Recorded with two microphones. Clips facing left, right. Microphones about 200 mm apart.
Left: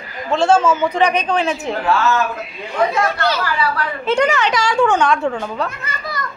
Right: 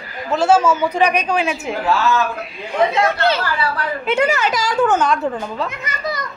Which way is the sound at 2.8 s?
20° right (ahead or behind).